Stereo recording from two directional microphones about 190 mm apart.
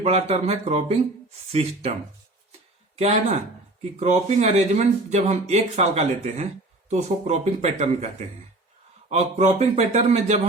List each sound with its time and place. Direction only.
0.0 s speech: 35° right (ahead or behind)
2.9 s speech: 35° right (ahead or behind)
9.0 s speech: 35° right (ahead or behind)